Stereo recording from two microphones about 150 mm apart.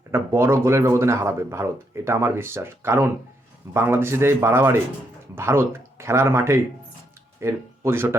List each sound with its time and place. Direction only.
0.1 s speech: 15° right (ahead or behind)